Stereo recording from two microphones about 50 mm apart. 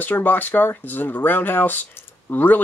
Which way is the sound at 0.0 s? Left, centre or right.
Left.